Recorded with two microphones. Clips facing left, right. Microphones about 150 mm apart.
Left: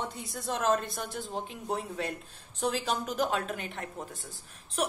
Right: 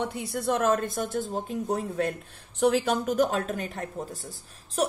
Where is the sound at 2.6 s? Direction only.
60° right (ahead or behind).